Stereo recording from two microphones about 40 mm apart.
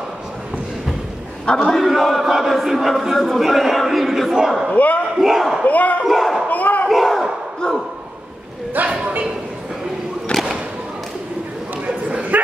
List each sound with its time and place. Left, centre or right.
1.4 s a man's voice: left
1.7 s chant: centre
4.7 s a man's voice: left
5.1 s speech: centre
5.7 s speech: left
6.0 s a sound: centre
6.5 s battle cry: left
6.9 s battle cry: centre
8.8 s a sound: right
10.3 s a sound: left
11.8 s bow-wow: right